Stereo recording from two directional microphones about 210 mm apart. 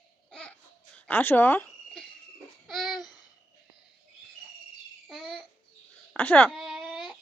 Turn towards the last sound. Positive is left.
turn(degrees=0)  # may be behind; listen again after turning